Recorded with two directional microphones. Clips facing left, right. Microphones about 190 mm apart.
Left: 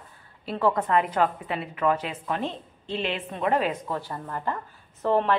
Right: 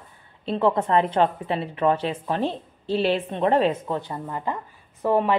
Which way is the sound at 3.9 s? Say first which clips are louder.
Right 3 dB; 15° right (ahead or behind).